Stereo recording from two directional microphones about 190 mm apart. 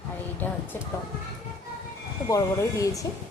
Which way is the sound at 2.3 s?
15° left (ahead or behind).